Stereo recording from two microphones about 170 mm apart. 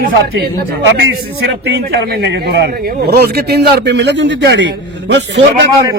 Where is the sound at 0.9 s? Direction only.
90° right.